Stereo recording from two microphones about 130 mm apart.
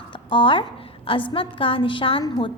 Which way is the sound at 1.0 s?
40° left (ahead or behind).